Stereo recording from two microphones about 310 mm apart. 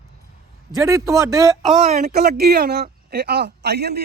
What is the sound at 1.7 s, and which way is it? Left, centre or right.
Speech, right.